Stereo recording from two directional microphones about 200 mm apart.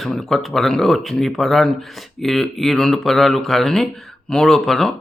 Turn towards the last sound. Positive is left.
turn(degrees=0)  # may be behind; listen again after turning